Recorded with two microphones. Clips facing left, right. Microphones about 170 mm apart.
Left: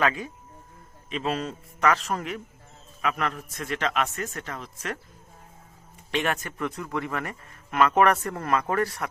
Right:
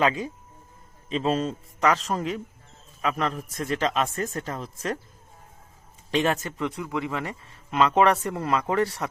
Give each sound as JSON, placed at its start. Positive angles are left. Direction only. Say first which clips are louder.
{"t": 0.0, "sound": "a man's voice", "louder": "right 2 dB", "side_deg": -25}
{"t": 6.1, "sound": "speech", "louder": "right 4 dB", "side_deg": -35}